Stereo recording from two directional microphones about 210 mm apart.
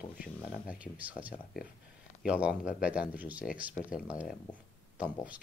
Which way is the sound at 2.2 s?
5° right (ahead or behind).